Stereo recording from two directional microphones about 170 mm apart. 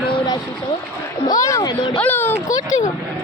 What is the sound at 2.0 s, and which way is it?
Speech, 10° left (ahead or behind).